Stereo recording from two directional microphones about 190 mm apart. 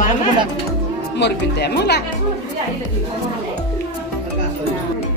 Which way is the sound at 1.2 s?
60° left (ahead or behind).